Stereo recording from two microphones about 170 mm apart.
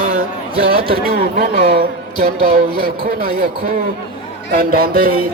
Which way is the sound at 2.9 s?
60° right (ahead or behind).